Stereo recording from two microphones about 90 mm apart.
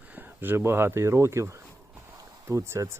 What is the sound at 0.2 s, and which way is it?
Speech, 25° right (ahead or behind).